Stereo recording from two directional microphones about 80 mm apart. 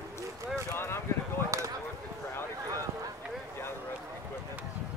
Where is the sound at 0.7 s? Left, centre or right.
Left.